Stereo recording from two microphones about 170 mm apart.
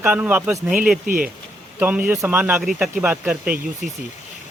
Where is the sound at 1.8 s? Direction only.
10° right (ahead or behind).